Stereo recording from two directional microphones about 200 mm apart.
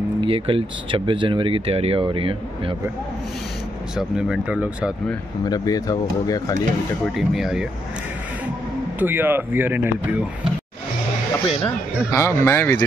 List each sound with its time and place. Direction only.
0.2 s speech: 25° right (ahead or behind)
3.9 s speech: 5° right (ahead or behind)
5.4 s speech: 20° left (ahead or behind)
7.2 s speech: centre (ahead or behind)
9.0 s speech: 10° right (ahead or behind)
11.6 s speech: 15° left (ahead or behind)